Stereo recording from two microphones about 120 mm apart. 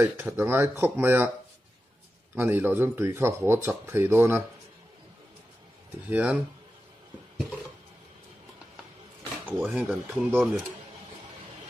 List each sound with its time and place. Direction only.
0.0 s speech: 20° right (ahead or behind)
2.3 s speech: 15° right (ahead or behind)
6.0 s speech: 10° right (ahead or behind)
9.5 s speech: 10° right (ahead or behind)